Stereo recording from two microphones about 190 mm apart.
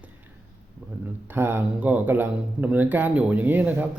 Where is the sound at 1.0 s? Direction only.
10° right (ahead or behind).